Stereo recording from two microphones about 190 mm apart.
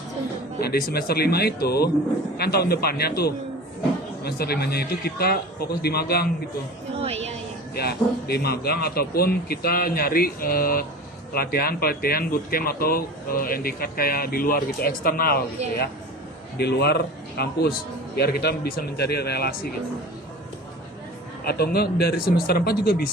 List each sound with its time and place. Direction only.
0.6 s speech: 55° left (ahead or behind)
7.0 s a woman's voice: 35° right (ahead or behind)
7.8 s speech: 55° left (ahead or behind)
16.6 s speech: 60° left (ahead or behind)
21.4 s speech: 55° left (ahead or behind)